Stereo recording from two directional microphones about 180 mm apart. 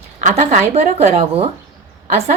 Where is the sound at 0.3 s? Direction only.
40° right (ahead or behind).